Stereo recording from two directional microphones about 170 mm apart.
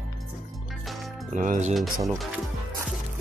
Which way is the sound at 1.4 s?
45° right (ahead or behind).